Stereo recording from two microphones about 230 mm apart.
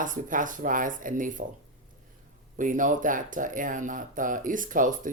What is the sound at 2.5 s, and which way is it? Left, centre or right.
Speech, right.